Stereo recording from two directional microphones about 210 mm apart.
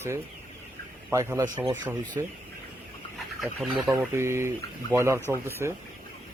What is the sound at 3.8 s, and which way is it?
Speech, 15° right (ahead or behind).